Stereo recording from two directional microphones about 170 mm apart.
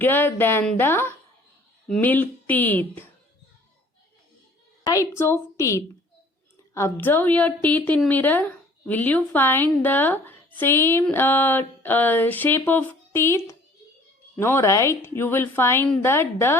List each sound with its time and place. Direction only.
0.0 s a woman's voice: 10° left (ahead or behind)
4.8 s a woman's voice: 20° left (ahead or behind)